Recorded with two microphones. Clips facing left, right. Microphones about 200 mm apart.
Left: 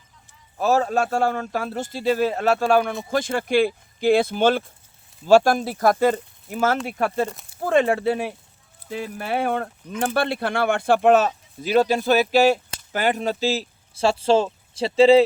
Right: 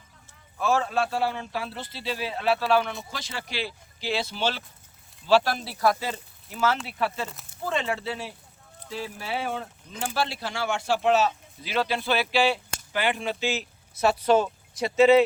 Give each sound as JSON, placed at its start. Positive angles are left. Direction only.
{"t": 0.6, "sound": "speech", "side_deg": 40}